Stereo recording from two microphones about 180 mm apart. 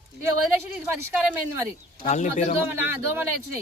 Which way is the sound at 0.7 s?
5° right (ahead or behind).